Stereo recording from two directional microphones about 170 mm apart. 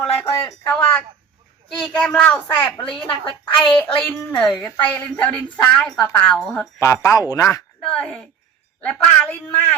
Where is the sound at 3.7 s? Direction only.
10° left (ahead or behind).